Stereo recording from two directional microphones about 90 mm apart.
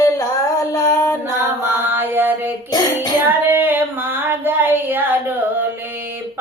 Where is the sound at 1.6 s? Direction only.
20° right (ahead or behind).